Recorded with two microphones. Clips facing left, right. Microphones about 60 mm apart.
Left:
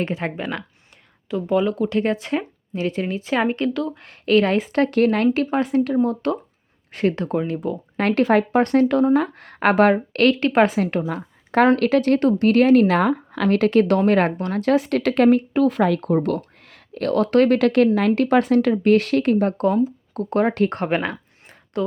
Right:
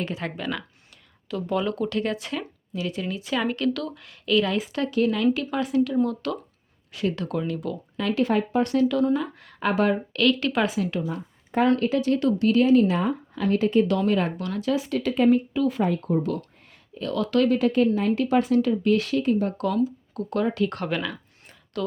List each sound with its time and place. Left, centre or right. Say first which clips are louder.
0.0 s speech: left 5 dB; left; by 1.9 s centre
1.9 s speech: left 6 dB; left
4.0 s a woman's voice: left 5 dB; left
7.9 s a woman's voice: left 6 dB; left
11.1 s a sound: left 6 dB; left
11.8 s speech: left 5 dB; left
13.9 s a woman's voice: left 6 dB; left
14.3 s speech: left 6 dB; left
16.6 s a sound: left 7 dB; left
17.1 s a woman's voice: left 5 dB; left
17.6 s a woman's voice: left 5 dB; left
19.5 s speech: left 5 dB; left
20.7 s a sound: left 6 dB; left